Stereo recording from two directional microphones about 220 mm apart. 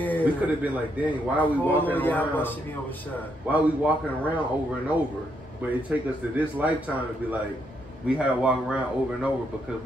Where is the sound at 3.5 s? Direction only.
5° right (ahead or behind).